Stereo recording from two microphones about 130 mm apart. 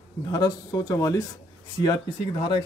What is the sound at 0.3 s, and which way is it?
Speech, 30° left (ahead or behind).